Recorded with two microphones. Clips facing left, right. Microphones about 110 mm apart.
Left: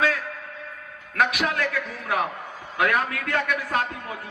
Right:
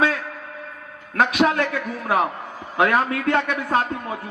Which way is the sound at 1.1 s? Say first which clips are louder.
Right 5 dB; 30° right (ahead or behind).